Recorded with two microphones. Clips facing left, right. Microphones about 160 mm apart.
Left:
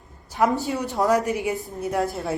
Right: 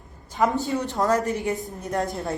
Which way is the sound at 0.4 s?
5° left (ahead or behind).